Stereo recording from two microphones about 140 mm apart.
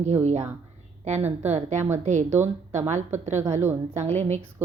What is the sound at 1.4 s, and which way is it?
A woman's voice, 55° right (ahead or behind).